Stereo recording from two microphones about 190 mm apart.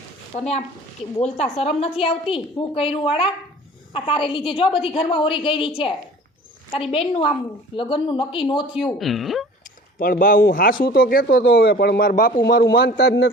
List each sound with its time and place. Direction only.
0.3 s a woman's voice: 35° left (ahead or behind)
8.7 s a woman's voice: centre (ahead or behind)
10.0 s speech: 45° left (ahead or behind)